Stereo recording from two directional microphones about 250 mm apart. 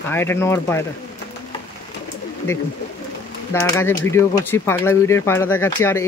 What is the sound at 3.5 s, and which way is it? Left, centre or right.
Speech, centre.